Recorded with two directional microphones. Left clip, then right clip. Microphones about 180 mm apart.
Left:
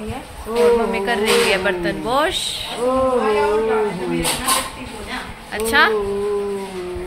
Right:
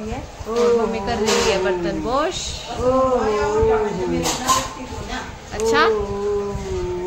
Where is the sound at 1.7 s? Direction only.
5° right (ahead or behind).